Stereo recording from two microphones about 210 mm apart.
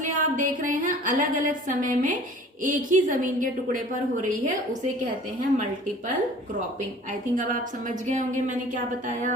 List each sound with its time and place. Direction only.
0.0 s a woman's voice: 40° right (ahead or behind)
7.1 s a woman's voice: 35° right (ahead or behind)